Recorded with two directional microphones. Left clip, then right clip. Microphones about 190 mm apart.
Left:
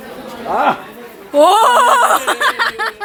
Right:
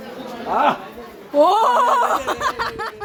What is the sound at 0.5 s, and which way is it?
Speech, 50° left (ahead or behind).